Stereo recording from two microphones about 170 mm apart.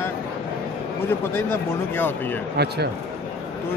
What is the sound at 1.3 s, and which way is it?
Speech, 10° left (ahead or behind).